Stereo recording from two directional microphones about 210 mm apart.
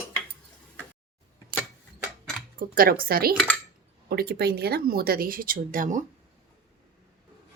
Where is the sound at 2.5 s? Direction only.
45° right (ahead or behind).